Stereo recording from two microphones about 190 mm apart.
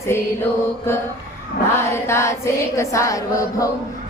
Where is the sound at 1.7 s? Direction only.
15° left (ahead or behind).